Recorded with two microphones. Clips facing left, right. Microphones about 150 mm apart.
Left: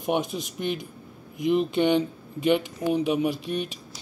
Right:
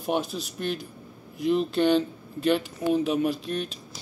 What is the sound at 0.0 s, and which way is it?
Speech, 20° left (ahead or behind).